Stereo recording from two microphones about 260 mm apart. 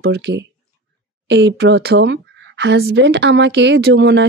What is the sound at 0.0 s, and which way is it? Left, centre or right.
A woman's voice, right.